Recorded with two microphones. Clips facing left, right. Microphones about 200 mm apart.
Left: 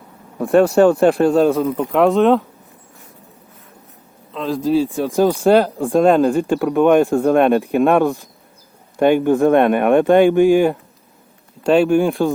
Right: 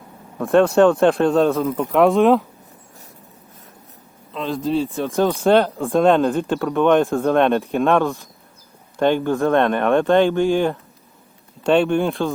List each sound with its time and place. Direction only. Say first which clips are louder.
0.4 s a man's voice: left 2 dB; centre (ahead or behind)
4.3 s a man's voice: left 4 dB; centre (ahead or behind)
7.9 s a man's voice: left 3 dB; 15° left (ahead or behind)